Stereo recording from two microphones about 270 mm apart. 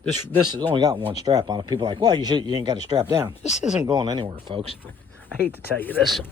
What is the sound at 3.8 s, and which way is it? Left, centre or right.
Speech, centre.